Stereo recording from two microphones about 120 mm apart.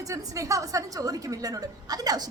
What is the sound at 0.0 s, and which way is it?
A woman's voice, 25° right (ahead or behind).